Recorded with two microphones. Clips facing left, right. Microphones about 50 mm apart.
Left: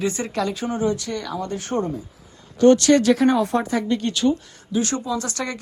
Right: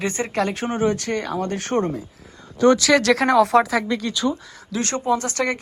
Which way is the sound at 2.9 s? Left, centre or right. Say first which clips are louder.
Right 1 dB; right.